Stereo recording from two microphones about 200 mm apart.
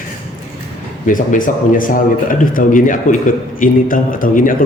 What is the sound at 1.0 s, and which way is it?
A man's voice, 40° left (ahead or behind).